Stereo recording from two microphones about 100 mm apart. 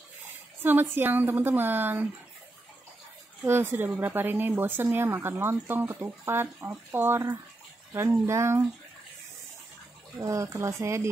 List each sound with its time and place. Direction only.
0.6 s speech: 20° right (ahead or behind)
3.4 s speech: 20° right (ahead or behind)
10.1 s speech: 30° right (ahead or behind)